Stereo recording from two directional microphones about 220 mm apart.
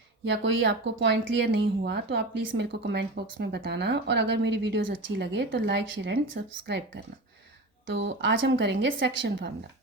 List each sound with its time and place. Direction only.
0.3 s speech: 55° right (ahead or behind)